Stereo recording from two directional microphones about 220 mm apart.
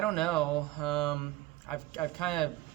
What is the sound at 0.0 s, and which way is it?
Speech, centre (ahead or behind).